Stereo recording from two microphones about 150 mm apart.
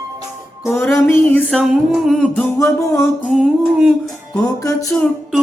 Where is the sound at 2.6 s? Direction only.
20° left (ahead or behind).